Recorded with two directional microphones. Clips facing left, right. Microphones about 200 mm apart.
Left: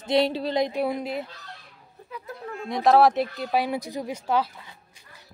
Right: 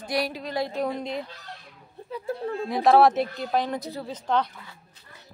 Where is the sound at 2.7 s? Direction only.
Centre (ahead or behind).